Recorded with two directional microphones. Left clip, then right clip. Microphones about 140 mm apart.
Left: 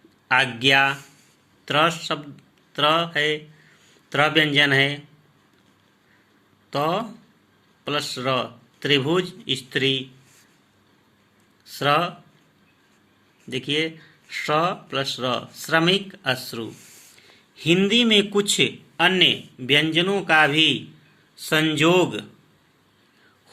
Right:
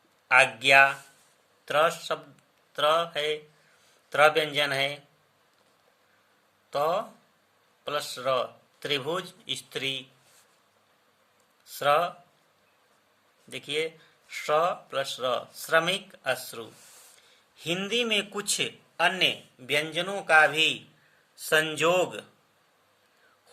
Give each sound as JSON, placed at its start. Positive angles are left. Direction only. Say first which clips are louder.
{"t": 0.3, "sound": "speech", "louder": "left 1 dB", "side_deg": 5}
{"t": 6.7, "sound": "speech", "louder": "left 3 dB", "side_deg": 0}
{"t": 11.6, "sound": "speech", "louder": "left 3 dB", "side_deg": 0}
{"t": 13.5, "sound": "speech", "louder": "left 6 dB", "side_deg": 0}